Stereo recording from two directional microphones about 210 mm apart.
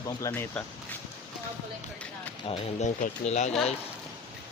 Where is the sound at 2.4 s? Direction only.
30° left (ahead or behind).